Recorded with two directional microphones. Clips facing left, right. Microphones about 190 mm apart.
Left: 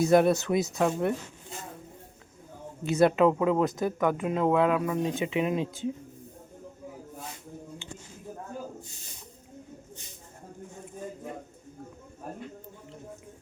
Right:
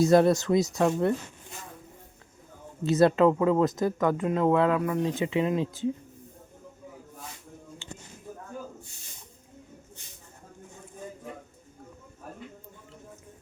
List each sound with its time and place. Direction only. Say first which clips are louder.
0.2 s speech: right 2 dB; 5° left (ahead or behind)
2.8 s speech: right 1 dB; 15° left (ahead or behind)